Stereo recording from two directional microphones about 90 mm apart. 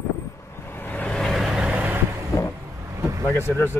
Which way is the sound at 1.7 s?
20° right (ahead or behind).